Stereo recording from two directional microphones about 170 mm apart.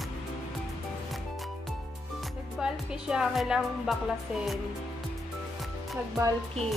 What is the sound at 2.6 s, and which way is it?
A woman's voice, 5° right (ahead or behind).